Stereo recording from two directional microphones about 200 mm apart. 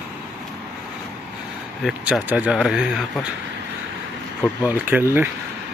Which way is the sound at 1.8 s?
Centre (ahead or behind).